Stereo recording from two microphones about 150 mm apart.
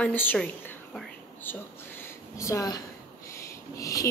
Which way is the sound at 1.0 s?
10° left (ahead or behind).